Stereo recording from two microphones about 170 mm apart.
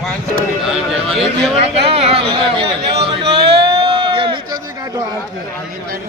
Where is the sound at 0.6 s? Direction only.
Centre (ahead or behind).